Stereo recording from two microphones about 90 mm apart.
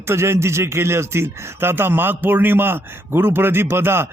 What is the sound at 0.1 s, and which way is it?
A man's voice, 30° right (ahead or behind).